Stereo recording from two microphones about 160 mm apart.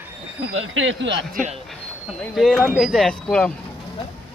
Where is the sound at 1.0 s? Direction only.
90° right.